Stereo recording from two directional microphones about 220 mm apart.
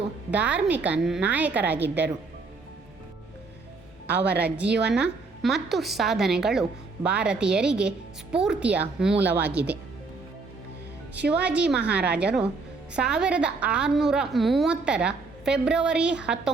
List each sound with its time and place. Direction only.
0.3 s a woman's voice: 5° right (ahead or behind)
4.1 s a woman's voice: 50° right (ahead or behind)
4.4 s a woman's voice: 5° right (ahead or behind)
11.3 s a woman's voice: 5° right (ahead or behind)